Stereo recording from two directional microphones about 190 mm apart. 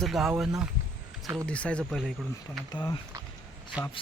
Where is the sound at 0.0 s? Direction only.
Centre (ahead or behind).